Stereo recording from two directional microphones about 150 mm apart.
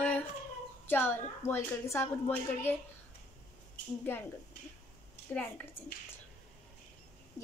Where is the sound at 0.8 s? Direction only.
15° left (ahead or behind).